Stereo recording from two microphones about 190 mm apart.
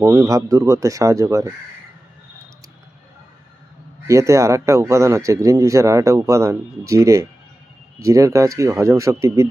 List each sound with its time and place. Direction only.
0.0 s a man's voice: 15° right (ahead or behind)
4.0 s a man's voice: 15° right (ahead or behind)